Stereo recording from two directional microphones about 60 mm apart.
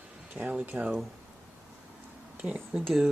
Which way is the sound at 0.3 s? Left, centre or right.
Right.